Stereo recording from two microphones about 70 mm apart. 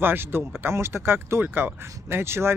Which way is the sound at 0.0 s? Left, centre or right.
Right.